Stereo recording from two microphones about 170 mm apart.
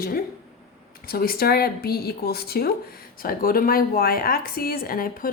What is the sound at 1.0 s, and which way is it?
A woman's voice, 60° left (ahead or behind).